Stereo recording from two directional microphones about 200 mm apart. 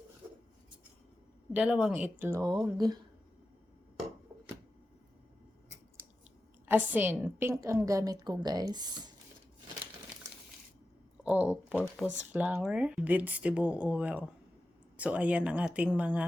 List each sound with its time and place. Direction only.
1.5 s a woman's voice: 5° right (ahead or behind); by 3.0 s 20° right (ahead or behind)
6.7 s a woman's voice: 10° right (ahead or behind)
11.2 s a woman's voice: 5° right (ahead or behind)